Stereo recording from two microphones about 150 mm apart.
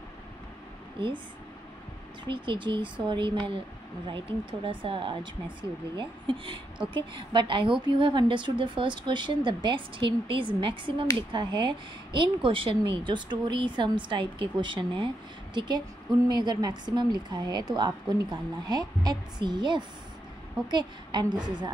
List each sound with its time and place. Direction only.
1.0 s speech: 35° right (ahead or behind)
2.2 s speech: 35° right (ahead or behind)
16.3 s a woman's voice: 30° right (ahead or behind)